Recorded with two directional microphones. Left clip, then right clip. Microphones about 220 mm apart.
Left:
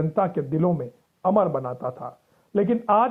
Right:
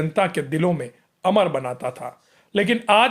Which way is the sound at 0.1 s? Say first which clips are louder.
Right 4 dB; 20° right (ahead or behind).